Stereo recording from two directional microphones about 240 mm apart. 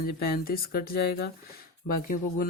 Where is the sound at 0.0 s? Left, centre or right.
Left.